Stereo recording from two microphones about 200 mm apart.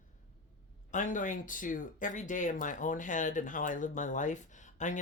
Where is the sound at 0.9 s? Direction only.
40° left (ahead or behind).